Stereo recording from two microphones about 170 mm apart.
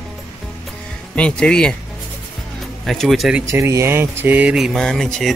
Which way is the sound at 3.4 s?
15° right (ahead or behind).